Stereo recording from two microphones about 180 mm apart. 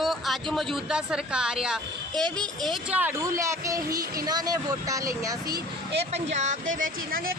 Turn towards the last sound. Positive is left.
turn(degrees=-40)  # may be behind; listen again after turning